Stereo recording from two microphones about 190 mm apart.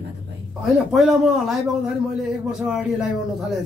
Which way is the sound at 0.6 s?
Centre (ahead or behind).